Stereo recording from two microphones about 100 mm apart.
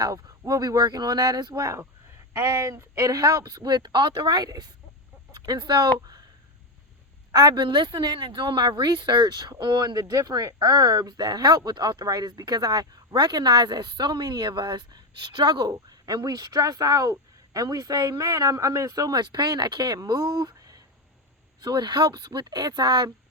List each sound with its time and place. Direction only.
0.0 s speech: 35° right (ahead or behind)
7.3 s speech: 45° right (ahead or behind)